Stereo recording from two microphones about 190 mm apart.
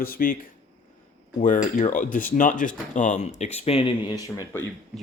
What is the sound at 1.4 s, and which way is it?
Speech, 45° left (ahead or behind).